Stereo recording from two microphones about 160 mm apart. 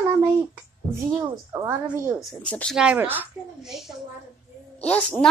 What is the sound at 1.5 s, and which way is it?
Speech, 20° right (ahead or behind).